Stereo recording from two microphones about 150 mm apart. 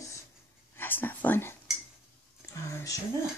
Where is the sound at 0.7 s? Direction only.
15° left (ahead or behind).